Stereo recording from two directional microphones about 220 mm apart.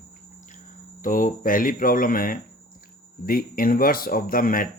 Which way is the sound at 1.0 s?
40° left (ahead or behind).